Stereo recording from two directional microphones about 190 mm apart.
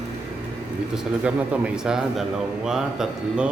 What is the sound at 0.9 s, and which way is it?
Speech, 5° right (ahead or behind).